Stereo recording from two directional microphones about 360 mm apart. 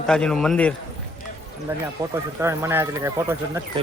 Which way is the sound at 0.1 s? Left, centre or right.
Centre.